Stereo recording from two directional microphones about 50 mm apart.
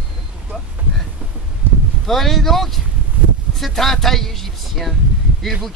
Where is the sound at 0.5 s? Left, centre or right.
Right.